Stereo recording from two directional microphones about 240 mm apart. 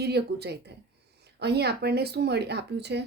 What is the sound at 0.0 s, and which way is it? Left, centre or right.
A woman's voice, right.